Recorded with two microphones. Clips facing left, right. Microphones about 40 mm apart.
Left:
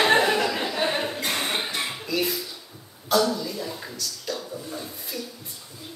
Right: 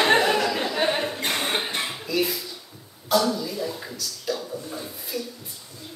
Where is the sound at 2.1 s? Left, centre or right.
Centre.